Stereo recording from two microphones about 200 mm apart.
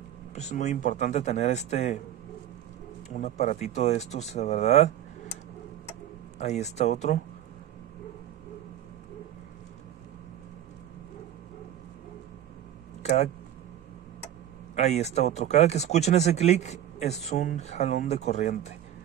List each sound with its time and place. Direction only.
0.3 s speech: 35° left (ahead or behind)
3.2 s speech: 35° left (ahead or behind)
6.3 s speech: 35° left (ahead or behind)
13.0 s speech: 35° left (ahead or behind)
14.8 s speech: 35° left (ahead or behind)